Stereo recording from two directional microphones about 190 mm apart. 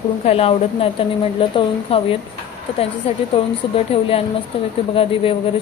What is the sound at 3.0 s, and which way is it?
Speech, 30° left (ahead or behind).